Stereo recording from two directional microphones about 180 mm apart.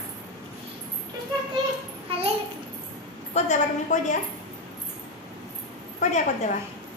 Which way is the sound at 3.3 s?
40° left (ahead or behind).